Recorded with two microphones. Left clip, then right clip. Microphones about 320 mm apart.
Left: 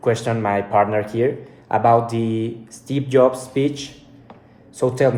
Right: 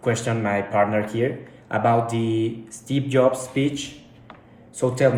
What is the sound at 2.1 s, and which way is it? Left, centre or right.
Speech, centre.